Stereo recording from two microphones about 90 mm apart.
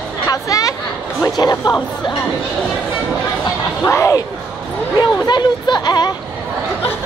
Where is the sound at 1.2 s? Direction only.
50° left (ahead or behind).